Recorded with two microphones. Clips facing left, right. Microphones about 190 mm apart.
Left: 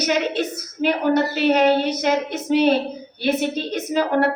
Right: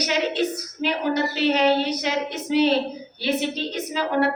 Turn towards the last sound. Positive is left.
turn(degrees=50)  # may be behind; listen again after turning